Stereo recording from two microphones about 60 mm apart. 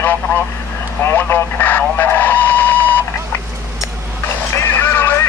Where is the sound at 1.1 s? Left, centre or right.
Left.